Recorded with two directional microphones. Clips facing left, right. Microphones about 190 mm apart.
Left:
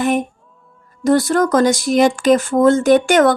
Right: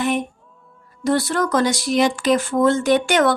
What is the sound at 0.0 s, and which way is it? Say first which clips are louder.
Speech: left 4 dB; 45° left (ahead or behind).